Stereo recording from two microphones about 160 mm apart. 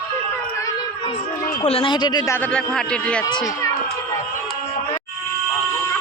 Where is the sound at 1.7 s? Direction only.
35° left (ahead or behind).